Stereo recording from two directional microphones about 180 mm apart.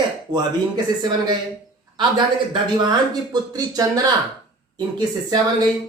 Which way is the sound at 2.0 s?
25° right (ahead or behind).